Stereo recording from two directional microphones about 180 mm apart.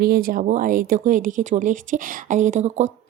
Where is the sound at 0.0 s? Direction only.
55° right (ahead or behind).